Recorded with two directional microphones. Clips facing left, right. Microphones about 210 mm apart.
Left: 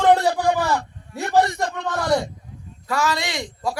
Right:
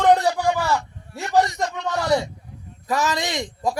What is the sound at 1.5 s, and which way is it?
Speech, 55° left (ahead or behind).